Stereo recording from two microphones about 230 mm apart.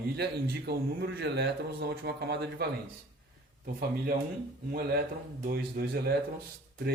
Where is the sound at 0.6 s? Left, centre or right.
Right.